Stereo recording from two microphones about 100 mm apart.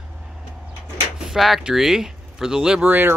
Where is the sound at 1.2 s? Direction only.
5° right (ahead or behind).